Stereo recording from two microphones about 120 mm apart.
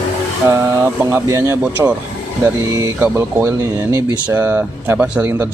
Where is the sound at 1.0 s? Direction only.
25° right (ahead or behind).